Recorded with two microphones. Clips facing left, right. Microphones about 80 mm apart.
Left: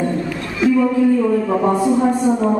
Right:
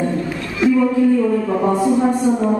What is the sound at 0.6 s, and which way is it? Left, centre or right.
Music, centre.